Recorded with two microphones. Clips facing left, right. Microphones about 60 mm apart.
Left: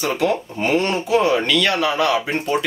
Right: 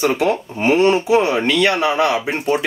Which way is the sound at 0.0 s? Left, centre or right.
Right.